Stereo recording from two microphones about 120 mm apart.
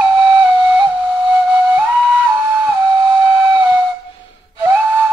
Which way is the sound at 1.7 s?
10° right (ahead or behind).